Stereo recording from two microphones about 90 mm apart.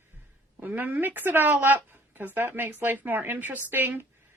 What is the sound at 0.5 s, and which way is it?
A woman's voice, 20° right (ahead or behind).